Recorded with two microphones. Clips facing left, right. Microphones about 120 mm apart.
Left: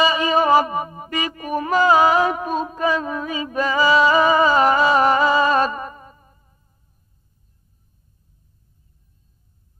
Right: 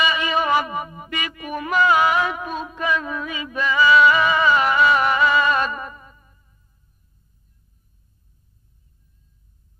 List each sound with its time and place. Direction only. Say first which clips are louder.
0.0 s music: left 4 dB; 35° left (ahead or behind)